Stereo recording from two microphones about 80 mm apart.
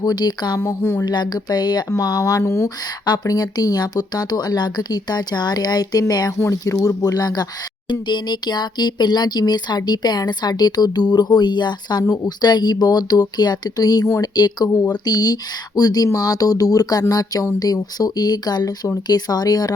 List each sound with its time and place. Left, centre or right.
0.0 s speech: left
0.6 s speech: left
1.0 s speech: left
3.1 s speech: left
6.3 s speech: left
7.9 s speech: left